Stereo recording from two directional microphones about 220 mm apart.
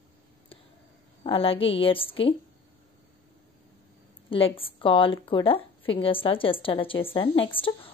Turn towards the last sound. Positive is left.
turn(degrees=25)  # may be behind; listen again after turning